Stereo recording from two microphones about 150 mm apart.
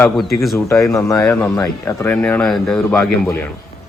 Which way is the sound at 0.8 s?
20° left (ahead or behind).